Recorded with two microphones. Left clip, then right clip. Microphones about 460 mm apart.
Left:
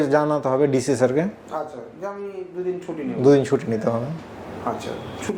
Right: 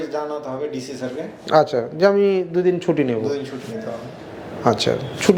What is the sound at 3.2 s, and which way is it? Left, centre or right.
Speech, left.